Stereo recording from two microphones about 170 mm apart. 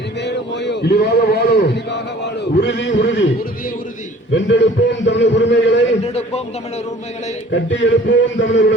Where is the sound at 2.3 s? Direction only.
90° left.